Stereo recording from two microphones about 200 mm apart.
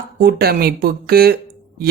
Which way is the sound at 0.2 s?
50° right (ahead or behind).